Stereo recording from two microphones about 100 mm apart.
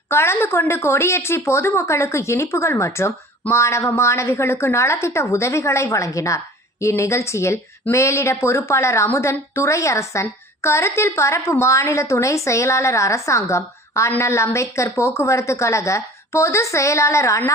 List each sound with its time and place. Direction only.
0.1 s a woman's voice: 25° left (ahead or behind)